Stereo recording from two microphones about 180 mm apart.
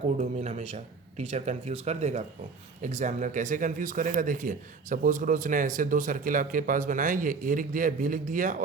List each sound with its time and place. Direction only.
0.2 s speech: 40° right (ahead or behind)